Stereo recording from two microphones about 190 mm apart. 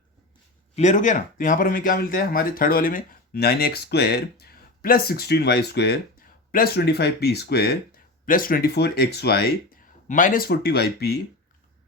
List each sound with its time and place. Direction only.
0.8 s speech: 40° left (ahead or behind); by 11.2 s 55° left (ahead or behind)